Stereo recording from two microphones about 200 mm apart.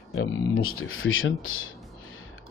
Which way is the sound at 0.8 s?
90° left.